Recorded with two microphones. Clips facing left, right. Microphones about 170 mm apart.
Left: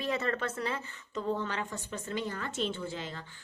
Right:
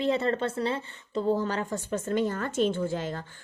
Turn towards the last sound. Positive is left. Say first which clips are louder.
# right 8 dB
turn(degrees=-50)  # may be behind; listen again after turning